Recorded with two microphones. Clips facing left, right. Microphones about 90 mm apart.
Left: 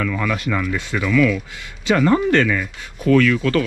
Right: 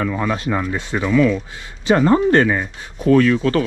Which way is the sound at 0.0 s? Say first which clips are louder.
Right 1 dB; 30° right (ahead or behind).